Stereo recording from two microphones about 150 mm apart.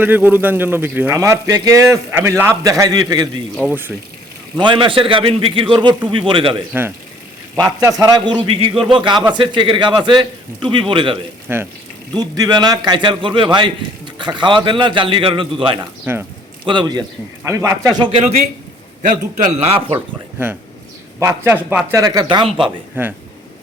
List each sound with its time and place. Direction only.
0.0 s a man's voice: 10° right (ahead or behind)
3.7 s speech: 15° right (ahead or behind)
4.5 s speech: 30° right (ahead or behind)
7.5 s a man's voice: 25° right (ahead or behind)
11.4 s speech: 15° right (ahead or behind)
12.1 s a man's voice: 25° right (ahead or behind)
19.0 s a man's voice: 55° right (ahead or behind); by 20.0 s 40° right (ahead or behind)
21.2 s a man's voice: 15° right (ahead or behind)
23.0 s speech: 15° right (ahead or behind)